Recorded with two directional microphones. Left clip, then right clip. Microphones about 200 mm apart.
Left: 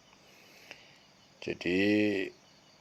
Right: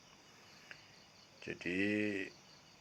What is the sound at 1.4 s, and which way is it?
Speech, 60° left (ahead or behind).